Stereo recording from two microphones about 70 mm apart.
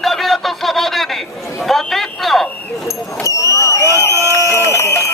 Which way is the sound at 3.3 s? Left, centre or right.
Left.